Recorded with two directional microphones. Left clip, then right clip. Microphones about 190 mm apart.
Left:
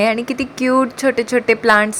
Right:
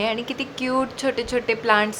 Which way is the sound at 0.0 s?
25° left (ahead or behind).